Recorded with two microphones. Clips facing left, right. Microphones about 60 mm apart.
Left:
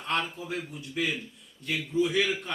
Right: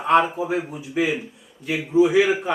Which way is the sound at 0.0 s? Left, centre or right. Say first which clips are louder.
Right 13 dB; centre.